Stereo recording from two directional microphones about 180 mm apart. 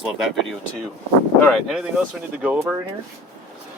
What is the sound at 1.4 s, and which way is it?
Speech, centre (ahead or behind).